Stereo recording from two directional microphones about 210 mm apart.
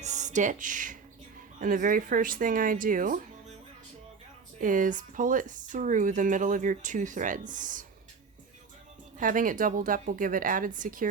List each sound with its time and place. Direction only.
0.0 s speech: 35° right (ahead or behind)
4.6 s speech: 40° right (ahead or behind)
9.1 s speech: 40° right (ahead or behind)